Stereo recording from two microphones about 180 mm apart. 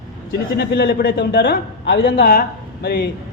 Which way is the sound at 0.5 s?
65° left (ahead or behind).